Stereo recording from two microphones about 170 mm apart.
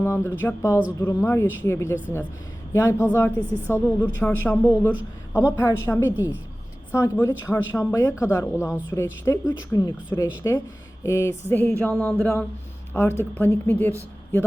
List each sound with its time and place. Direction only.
0.0 s speech: 15° left (ahead or behind)